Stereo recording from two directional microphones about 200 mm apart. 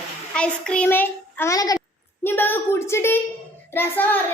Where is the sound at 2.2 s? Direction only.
10° left (ahead or behind).